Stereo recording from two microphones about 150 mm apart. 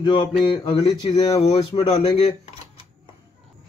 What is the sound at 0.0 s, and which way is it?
A man's voice, 30° left (ahead or behind).